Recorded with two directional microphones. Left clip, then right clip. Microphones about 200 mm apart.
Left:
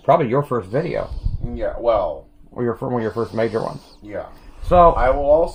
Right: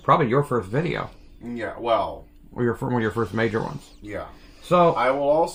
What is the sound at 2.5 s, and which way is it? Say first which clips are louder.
Speech: left 2 dB; 30° right (ahead or behind).